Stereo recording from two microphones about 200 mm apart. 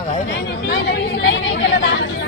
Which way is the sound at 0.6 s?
60° left (ahead or behind).